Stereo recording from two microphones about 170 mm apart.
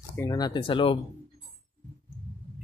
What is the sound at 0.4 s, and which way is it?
Speech, 25° left (ahead or behind).